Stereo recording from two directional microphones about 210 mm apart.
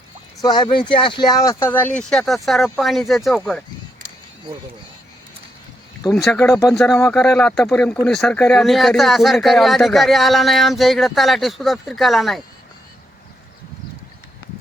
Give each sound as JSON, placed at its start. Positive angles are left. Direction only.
{"t": 0.4, "sound": "speech", "side_deg": 20}
{"t": 6.1, "sound": "speech", "side_deg": 5}